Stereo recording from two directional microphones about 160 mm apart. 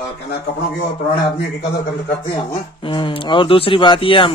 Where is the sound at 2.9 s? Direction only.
30° left (ahead or behind).